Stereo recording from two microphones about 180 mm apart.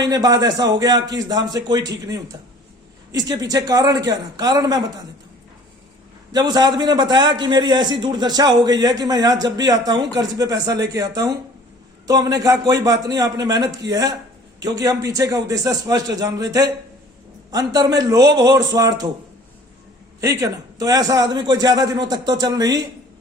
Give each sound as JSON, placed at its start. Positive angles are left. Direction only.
{"t": 0.0, "sound": "a man's voice", "side_deg": -20}
{"t": 6.3, "sound": "a man's voice", "side_deg": -20}
{"t": 20.2, "sound": "a man's voice", "side_deg": -15}